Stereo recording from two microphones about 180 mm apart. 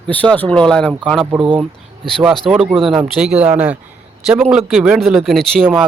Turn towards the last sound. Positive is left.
turn(degrees=0)  # may be behind; listen again after turning